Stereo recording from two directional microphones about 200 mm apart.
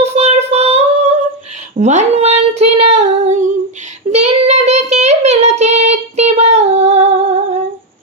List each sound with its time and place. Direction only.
0.0 s female singing: 35° right (ahead or behind)
4.1 s child singing: 35° right (ahead or behind)